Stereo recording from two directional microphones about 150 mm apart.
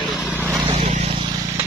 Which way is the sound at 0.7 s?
45° right (ahead or behind).